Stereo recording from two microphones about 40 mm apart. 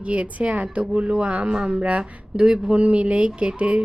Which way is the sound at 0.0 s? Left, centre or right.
Right.